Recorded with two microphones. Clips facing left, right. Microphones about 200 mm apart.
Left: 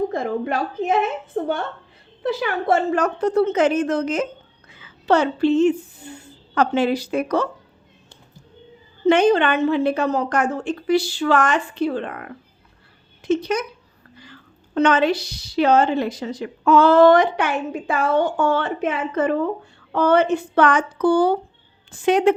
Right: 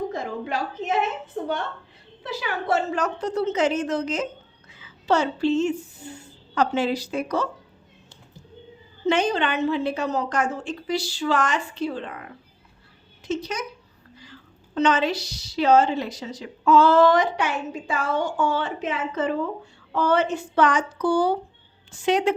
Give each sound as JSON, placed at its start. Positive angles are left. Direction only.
{"t": 0.1, "sound": "a woman's voice", "side_deg": 55}
{"t": 9.0, "sound": "a woman's voice", "side_deg": 55}
{"t": 14.8, "sound": "a woman's voice", "side_deg": 55}